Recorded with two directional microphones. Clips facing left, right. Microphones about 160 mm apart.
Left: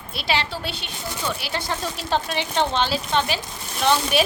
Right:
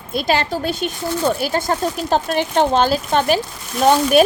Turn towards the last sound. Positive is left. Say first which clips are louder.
# right 7 dB
turn(degrees=-45)  # may be behind; listen again after turning